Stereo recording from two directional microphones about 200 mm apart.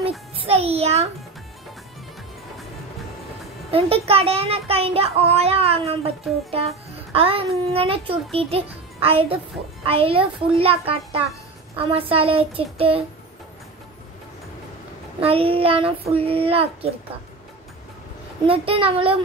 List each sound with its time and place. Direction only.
0.4 s speech: 30° right (ahead or behind)
3.7 s speech: 30° right (ahead or behind)
7.2 s speech: 30° right (ahead or behind)
15.1 s speech: 30° right (ahead or behind)
18.5 s speech: 30° right (ahead or behind)